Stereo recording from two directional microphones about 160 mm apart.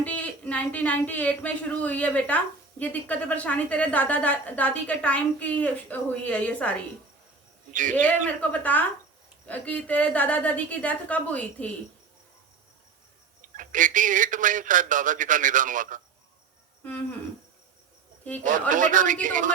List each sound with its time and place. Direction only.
0.0 s speech: 10° left (ahead or behind)
7.7 s a man's voice: 55° right (ahead or behind)
7.9 s speech: 10° left (ahead or behind)
13.6 s a man's voice: 55° right (ahead or behind)
16.8 s speech: 10° left (ahead or behind)
18.7 s a man's voice: 55° right (ahead or behind)